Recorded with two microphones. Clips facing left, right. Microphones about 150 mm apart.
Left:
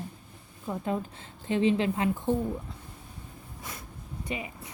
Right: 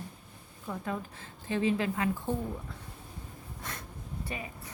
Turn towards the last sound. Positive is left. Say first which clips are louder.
# left 4 dB
turn(degrees=15)  # may be behind; listen again after turning